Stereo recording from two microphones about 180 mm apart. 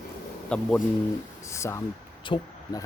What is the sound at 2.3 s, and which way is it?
Speech, 30° left (ahead or behind).